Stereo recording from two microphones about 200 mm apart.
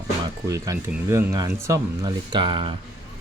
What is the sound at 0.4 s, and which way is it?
Speech, 15° right (ahead or behind).